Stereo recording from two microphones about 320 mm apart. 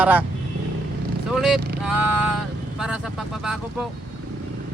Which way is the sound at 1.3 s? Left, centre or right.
Centre.